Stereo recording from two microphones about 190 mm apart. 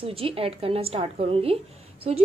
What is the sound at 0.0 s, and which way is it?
A woman's voice, 30° right (ahead or behind).